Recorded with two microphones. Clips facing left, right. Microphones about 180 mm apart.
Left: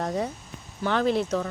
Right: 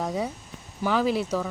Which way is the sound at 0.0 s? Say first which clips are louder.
Even; 5° right (ahead or behind).